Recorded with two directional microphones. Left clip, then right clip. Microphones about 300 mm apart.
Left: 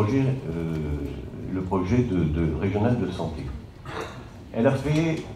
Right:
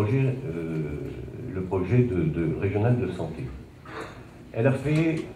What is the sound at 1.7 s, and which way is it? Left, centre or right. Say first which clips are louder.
A man's voice: even; left.